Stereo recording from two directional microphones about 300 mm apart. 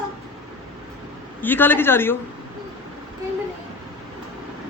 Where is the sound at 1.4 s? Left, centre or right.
Centre.